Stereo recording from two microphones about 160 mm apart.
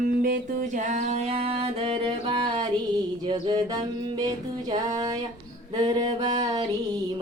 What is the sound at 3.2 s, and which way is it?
Music, 25° right (ahead or behind).